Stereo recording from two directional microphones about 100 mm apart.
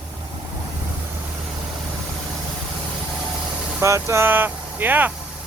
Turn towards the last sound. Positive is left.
turn(degrees=-20)  # may be behind; listen again after turning